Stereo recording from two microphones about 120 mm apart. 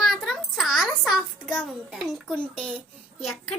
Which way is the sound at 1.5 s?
Centre (ahead or behind).